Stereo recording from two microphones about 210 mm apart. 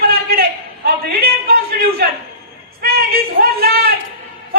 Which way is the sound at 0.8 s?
45° right (ahead or behind).